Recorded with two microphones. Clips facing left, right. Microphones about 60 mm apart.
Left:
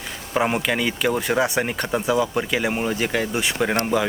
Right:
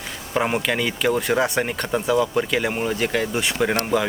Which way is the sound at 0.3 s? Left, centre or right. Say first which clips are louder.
Even; centre.